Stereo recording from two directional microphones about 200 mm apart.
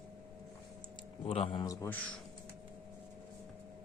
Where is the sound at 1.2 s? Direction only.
30° left (ahead or behind); by 2.0 s 10° left (ahead or behind).